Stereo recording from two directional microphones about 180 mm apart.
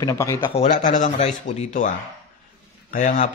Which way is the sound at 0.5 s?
45° left (ahead or behind).